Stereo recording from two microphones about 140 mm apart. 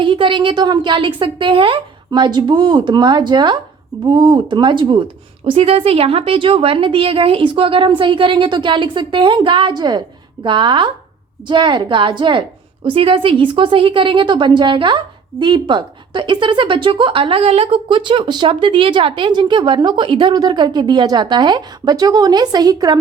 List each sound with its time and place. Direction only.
0.0 s a woman's voice: 35° right (ahead or behind)